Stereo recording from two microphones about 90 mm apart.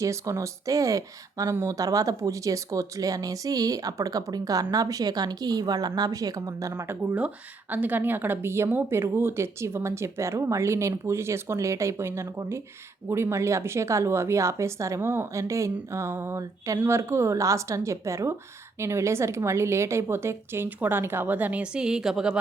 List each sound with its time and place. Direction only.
0.0 s speech: 35° right (ahead or behind)
6.8 s speech: 20° right (ahead or behind)